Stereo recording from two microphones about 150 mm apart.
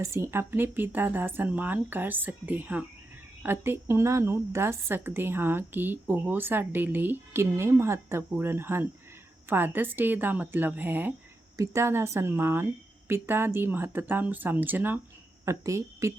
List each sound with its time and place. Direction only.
0.0 s a woman's voice: 20° right (ahead or behind)